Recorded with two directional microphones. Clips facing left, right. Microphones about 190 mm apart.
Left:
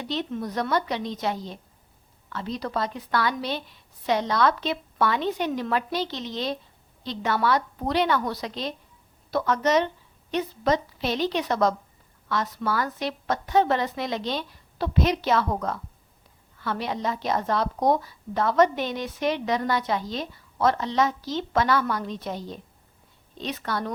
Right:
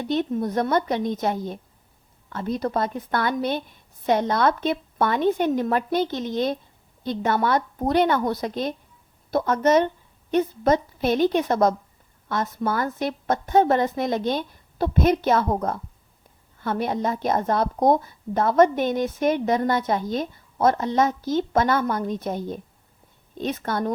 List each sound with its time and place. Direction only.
0.0 s a woman's voice: 50° right (ahead or behind)
12.5 s speech: 25° right (ahead or behind)
12.8 s a woman's voice: 50° right (ahead or behind)
16.6 s a woman's voice: 50° right (ahead or behind)